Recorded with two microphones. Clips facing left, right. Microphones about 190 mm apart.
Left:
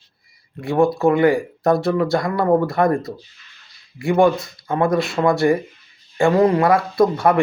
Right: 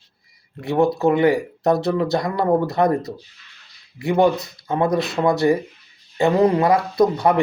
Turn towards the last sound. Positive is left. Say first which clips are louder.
# left 1 dB
turn(degrees=-20)  # may be behind; listen again after turning